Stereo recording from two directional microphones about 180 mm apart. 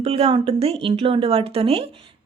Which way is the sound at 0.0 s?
30° right (ahead or behind).